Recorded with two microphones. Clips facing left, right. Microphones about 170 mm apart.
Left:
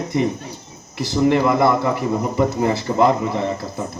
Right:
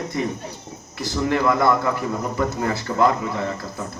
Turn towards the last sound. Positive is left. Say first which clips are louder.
# left 4 dB
turn(degrees=25)  # may be behind; listen again after turning